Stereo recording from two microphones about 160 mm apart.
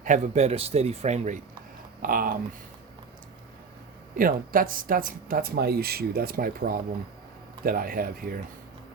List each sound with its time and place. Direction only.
0.0 s speech: 45° right (ahead or behind)
2.0 s speech: 60° right (ahead or behind)
4.2 s speech: 60° right (ahead or behind)